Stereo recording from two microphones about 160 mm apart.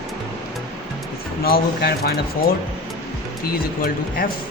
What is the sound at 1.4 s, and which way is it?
Speech, 75° left (ahead or behind).